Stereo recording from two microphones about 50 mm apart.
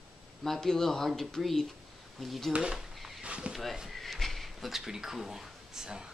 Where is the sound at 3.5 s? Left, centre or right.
Centre.